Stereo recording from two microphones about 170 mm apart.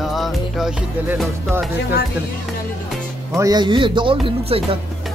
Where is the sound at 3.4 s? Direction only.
25° right (ahead or behind).